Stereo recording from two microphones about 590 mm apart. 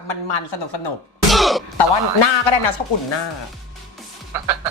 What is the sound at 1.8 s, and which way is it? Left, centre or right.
A man's voice, left.